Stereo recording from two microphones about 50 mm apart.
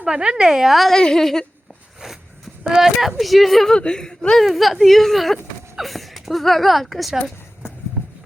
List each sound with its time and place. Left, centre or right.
0.0 s a woman's voice: centre
0.9 s speech: centre
2.6 s speech: centre
3.7 s speech: centre
4.4 s speech: centre